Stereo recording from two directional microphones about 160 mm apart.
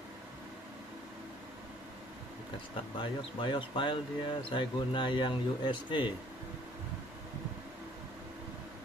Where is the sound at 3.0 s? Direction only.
30° left (ahead or behind).